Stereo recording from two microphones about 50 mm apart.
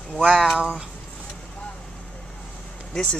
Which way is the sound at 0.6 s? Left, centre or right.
Right.